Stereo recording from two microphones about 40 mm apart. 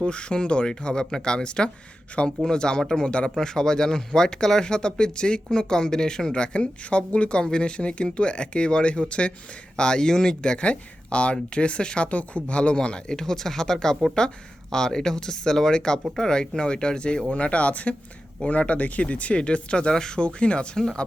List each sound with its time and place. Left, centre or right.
0.0 s speech: left